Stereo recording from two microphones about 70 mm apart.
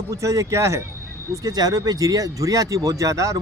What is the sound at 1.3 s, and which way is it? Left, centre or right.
Speech, right.